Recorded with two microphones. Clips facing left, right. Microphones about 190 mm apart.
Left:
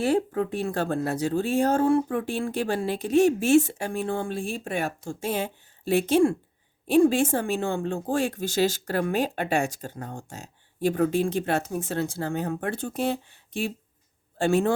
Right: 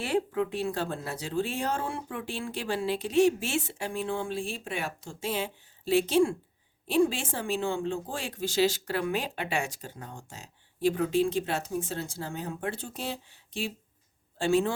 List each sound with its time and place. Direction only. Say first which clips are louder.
0.0 s speech: left 4 dB; 45° left (ahead or behind)